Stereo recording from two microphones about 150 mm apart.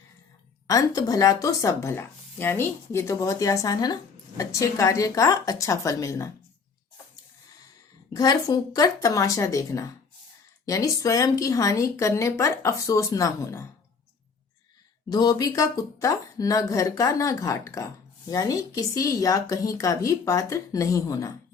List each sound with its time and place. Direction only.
0.7 s speech: 25° left (ahead or behind)
8.1 s speech: 25° left (ahead or behind)
15.1 s speech: 25° left (ahead or behind)